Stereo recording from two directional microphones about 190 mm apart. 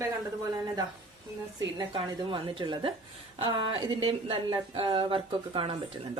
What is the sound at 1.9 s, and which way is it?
A woman's voice, 25° right (ahead or behind).